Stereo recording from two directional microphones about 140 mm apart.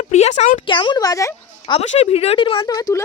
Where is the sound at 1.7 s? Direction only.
50° left (ahead or behind).